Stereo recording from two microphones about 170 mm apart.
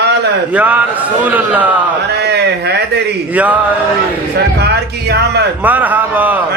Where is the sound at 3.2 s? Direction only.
10° right (ahead or behind).